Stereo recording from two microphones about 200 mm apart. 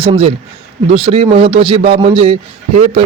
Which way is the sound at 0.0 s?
30° right (ahead or behind).